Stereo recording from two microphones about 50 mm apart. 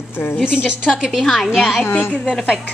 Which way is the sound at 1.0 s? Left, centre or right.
Centre.